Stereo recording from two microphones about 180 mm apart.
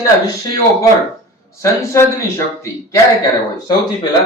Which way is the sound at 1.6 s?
15° left (ahead or behind).